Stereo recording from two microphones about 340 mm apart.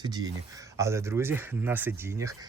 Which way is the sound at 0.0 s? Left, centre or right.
Centre.